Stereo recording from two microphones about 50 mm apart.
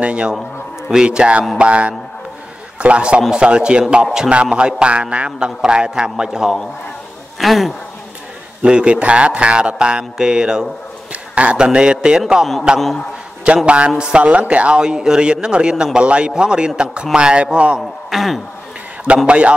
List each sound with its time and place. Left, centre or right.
0.0 s a man's voice: centre
7.3 s speech: centre
8.6 s speech: centre
11.1 s a sound: right
11.5 s a man's voice: centre
17.7 s a man's voice: centre
19.2 s speech: right